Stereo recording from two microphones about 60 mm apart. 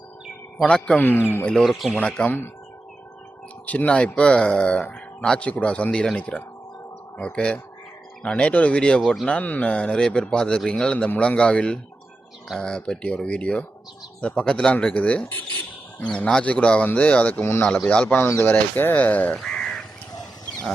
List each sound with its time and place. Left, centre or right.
0.6 s speech: centre
0.9 s speech: left
1.5 s speech: centre
2.0 s speech: centre
3.7 s speech: left
17.4 s speech: left
17.8 s speech: left
18.9 s speech: left
19.4 s crow: centre